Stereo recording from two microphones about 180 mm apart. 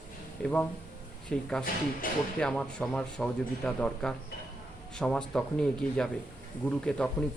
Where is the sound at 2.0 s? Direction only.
50° left (ahead or behind).